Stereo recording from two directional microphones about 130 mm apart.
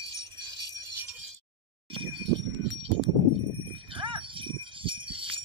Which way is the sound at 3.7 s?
40° right (ahead or behind).